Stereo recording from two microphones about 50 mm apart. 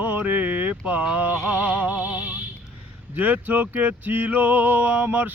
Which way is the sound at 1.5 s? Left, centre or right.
Right.